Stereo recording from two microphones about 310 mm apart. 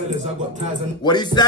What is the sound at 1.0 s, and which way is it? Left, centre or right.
Speech, centre.